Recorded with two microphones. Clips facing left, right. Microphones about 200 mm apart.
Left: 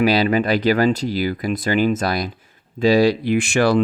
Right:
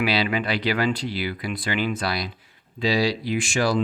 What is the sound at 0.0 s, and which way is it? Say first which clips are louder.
Speech: left 7 dB; 40° left (ahead or behind).